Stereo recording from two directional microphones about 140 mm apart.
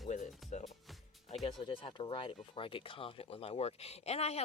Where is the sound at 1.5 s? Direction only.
40° left (ahead or behind).